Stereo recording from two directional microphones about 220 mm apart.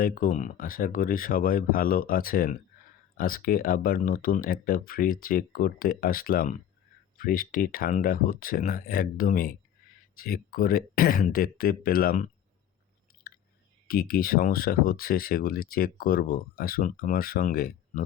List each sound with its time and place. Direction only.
0.0 s speech: 40° left (ahead or behind)
13.2 s a sound: 45° left (ahead or behind)
13.8 s speech: 40° left (ahead or behind)